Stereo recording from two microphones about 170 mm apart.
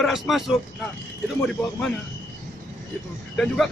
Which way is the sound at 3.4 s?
5° left (ahead or behind).